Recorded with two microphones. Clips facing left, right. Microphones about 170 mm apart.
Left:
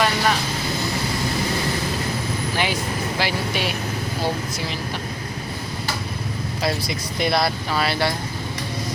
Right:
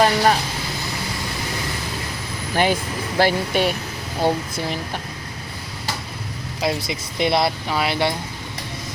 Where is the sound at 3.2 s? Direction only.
50° right (ahead or behind).